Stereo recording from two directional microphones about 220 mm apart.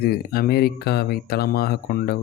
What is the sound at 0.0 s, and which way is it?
Speech, 45° left (ahead or behind).